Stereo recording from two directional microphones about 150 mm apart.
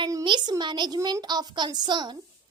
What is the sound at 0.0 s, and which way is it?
A child's voice, 25° right (ahead or behind).